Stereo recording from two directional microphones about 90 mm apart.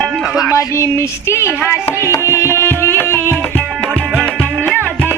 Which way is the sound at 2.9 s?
25° left (ahead or behind).